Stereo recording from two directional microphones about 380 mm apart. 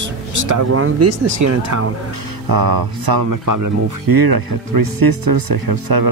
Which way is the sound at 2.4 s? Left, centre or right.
Right.